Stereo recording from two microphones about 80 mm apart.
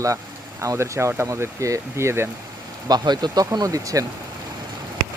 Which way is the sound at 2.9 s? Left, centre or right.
Right.